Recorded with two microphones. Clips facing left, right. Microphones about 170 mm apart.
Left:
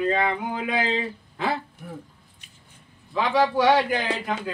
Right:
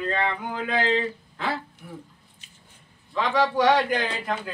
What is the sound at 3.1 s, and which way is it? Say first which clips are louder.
Speech: left 1 dB; 10° left (ahead or behind).